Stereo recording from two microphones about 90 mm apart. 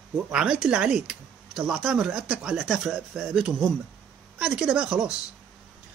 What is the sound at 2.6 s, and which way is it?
Speech, centre (ahead or behind).